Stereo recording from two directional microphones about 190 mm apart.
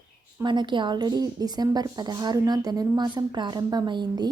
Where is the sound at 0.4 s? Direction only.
25° right (ahead or behind).